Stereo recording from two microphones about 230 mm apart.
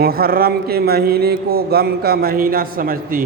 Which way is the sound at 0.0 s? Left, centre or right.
Right.